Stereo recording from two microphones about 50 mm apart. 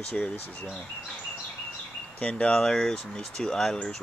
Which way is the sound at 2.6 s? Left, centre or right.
Centre.